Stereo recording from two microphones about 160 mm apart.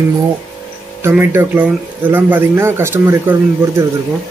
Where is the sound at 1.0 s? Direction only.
15° right (ahead or behind).